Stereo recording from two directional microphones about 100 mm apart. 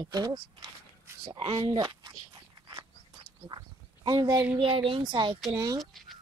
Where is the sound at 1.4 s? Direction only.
50° right (ahead or behind).